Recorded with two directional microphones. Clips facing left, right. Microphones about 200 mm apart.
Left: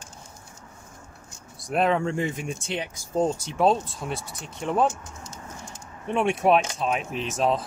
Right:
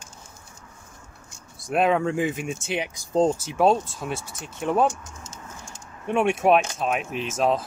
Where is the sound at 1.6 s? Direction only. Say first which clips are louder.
Right 2 dB; centre (ahead or behind).